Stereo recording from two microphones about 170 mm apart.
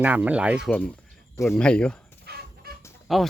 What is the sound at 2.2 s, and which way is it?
Fowl, 70° right (ahead or behind).